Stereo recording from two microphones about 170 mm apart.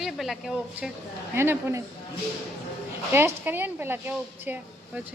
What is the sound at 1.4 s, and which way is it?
Speech, 15° right (ahead or behind).